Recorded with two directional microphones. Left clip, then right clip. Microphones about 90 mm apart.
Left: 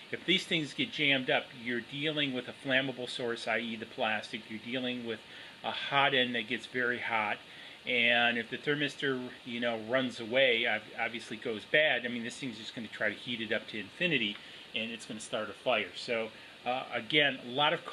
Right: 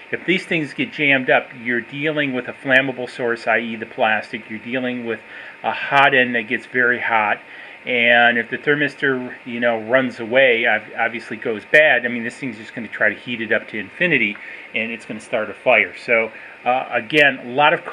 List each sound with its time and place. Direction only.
0.1 s speech: 10° right (ahead or behind)
12.3 s speech: 15° right (ahead or behind)
12.9 s speech: 5° right (ahead or behind)
15.3 s speech: 5° right (ahead or behind)